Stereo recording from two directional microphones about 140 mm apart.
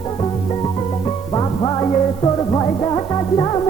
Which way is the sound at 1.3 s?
30° left (ahead or behind).